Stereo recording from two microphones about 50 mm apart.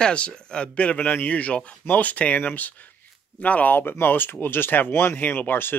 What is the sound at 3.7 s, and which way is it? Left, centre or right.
Speech, left.